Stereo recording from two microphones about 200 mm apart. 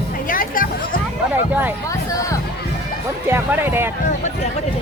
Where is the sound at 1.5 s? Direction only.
10° right (ahead or behind).